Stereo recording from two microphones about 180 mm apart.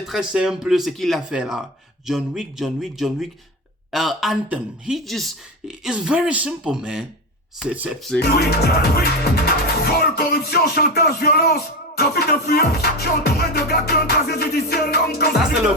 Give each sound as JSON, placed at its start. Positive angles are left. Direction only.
{"t": 0.1, "sound": "speech", "side_deg": -5}
{"t": 8.2, "sound": "music", "side_deg": 65}